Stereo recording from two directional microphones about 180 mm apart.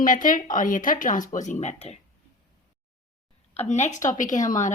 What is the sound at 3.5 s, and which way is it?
A woman's voice, 40° left (ahead or behind).